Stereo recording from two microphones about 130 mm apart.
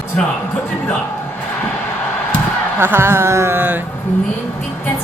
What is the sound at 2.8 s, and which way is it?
Speech, 20° right (ahead or behind).